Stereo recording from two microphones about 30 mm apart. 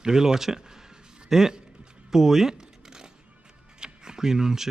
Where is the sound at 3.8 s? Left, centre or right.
Centre.